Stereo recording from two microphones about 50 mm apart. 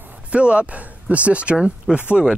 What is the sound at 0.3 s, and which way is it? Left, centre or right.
Speech, right.